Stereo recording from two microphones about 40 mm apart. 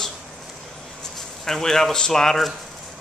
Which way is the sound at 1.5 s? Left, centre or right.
Centre.